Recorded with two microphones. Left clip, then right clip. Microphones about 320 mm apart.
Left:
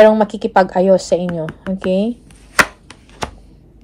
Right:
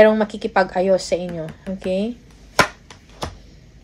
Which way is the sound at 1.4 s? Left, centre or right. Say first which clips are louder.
Left 6 dB; left.